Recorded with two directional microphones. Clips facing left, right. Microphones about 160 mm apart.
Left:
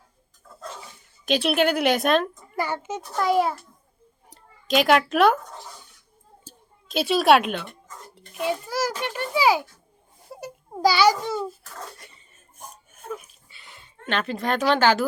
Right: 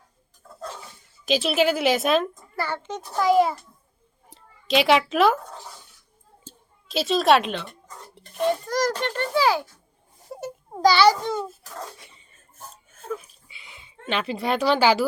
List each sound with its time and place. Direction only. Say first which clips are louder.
1.2 s a woman's voice: even; centre (ahead or behind)
2.6 s a woman's voice: left 2 dB; 10° left (ahead or behind)
4.7 s a woman's voice: even; centre (ahead or behind)
6.9 s a woman's voice: left 1 dB; centre (ahead or behind)
12.6 s a sound: left 1 dB; 15° left (ahead or behind)
13.5 s a sound: even; 5° right (ahead or behind)
14.7 s speech: even; 10° right (ahead or behind)